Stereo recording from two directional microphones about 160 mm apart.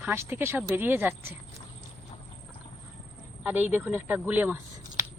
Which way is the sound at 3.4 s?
10° right (ahead or behind).